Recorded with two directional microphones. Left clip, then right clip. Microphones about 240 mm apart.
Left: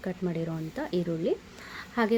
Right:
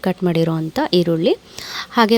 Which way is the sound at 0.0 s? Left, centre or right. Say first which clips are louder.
Right 15 dB; right.